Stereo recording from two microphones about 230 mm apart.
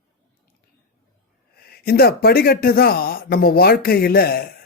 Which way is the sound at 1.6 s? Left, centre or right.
Left.